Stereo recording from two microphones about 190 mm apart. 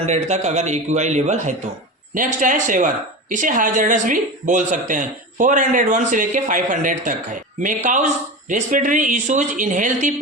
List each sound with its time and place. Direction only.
0.0 s speech: 35° right (ahead or behind)